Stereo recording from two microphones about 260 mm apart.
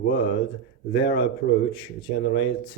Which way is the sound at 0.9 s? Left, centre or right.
Left.